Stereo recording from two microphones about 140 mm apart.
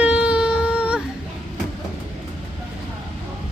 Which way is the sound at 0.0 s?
10° right (ahead or behind).